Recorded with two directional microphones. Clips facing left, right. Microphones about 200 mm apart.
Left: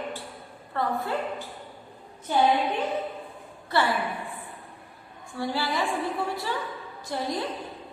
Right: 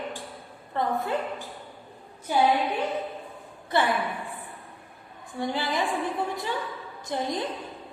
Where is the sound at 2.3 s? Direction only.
10° right (ahead or behind).